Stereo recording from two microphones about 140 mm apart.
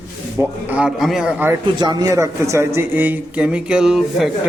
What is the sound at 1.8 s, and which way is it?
A man's voice, 30° right (ahead or behind).